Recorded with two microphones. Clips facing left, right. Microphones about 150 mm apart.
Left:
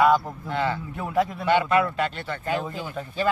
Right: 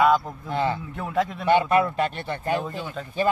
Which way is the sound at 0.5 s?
25° right (ahead or behind).